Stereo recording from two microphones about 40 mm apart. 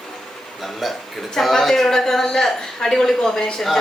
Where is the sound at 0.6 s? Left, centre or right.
Centre.